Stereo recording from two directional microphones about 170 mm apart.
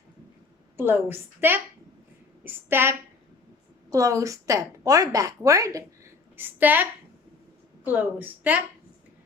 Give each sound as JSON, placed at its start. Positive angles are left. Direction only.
{"t": 0.8, "sound": "a woman's voice", "side_deg": -15}
{"t": 7.9, "sound": "a woman's voice", "side_deg": -10}